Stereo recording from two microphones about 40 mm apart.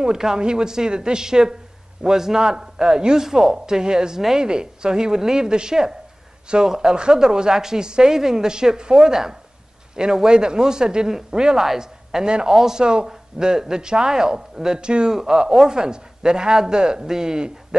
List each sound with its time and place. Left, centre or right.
0.0 s a woman's voice: centre